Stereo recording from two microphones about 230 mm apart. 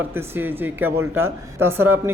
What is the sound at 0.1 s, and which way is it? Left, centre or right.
Speech, centre.